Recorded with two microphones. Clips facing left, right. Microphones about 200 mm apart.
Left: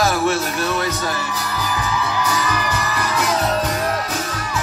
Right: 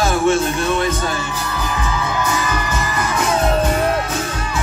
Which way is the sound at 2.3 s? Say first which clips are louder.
Right 1 dB; 25° right (ahead or behind).